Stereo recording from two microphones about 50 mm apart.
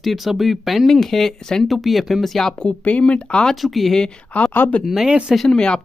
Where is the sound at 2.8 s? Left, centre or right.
Left.